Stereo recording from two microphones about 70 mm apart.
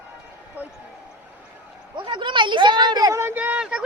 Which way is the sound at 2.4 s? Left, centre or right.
Right.